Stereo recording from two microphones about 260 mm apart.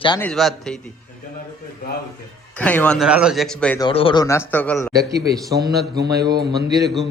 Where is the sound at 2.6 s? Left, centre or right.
Centre.